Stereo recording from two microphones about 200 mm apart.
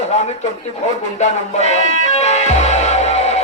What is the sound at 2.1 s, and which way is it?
Music, 35° left (ahead or behind).